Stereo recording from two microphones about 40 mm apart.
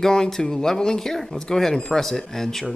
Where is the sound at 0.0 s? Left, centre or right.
Centre.